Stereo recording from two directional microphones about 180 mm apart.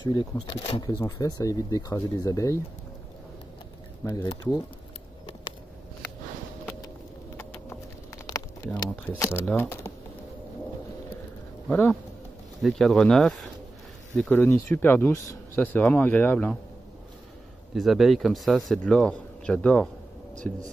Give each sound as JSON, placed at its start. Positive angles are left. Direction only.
{"t": 0.0, "sound": "speech", "side_deg": 25}
{"t": 0.8, "sound": "speech", "side_deg": 20}
{"t": 4.0, "sound": "speech", "side_deg": 15}
{"t": 8.3, "sound": "a sound", "side_deg": 20}
{"t": 9.2, "sound": "speech", "side_deg": 10}
{"t": 11.6, "sound": "speech", "side_deg": 5}
{"t": 17.7, "sound": "speech", "side_deg": 0}